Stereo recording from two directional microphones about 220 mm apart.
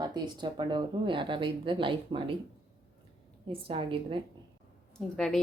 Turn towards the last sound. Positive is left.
turn(degrees=5)  # may be behind; listen again after turning